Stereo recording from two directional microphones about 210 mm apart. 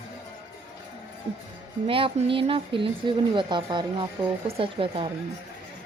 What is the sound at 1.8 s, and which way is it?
A woman's voice, 25° right (ahead or behind).